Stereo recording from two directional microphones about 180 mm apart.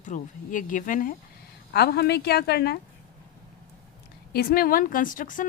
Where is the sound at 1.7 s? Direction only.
60° left (ahead or behind).